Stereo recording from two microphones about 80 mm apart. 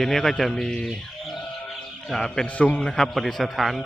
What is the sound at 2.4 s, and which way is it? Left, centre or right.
Speech, centre.